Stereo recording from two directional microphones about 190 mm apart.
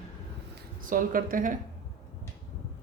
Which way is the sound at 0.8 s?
45° right (ahead or behind).